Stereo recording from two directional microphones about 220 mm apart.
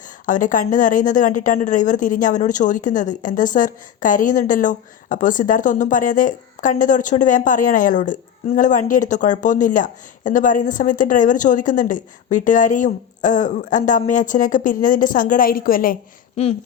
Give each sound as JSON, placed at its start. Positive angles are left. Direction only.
{"t": 0.3, "sound": "a woman's voice", "side_deg": 35}